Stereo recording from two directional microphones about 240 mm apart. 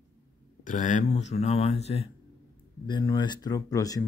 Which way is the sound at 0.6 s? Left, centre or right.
Left.